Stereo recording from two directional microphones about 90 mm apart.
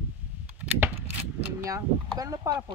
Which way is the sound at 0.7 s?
20° right (ahead or behind).